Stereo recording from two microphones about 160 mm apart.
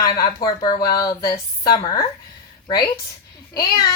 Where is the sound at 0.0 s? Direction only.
25° left (ahead or behind).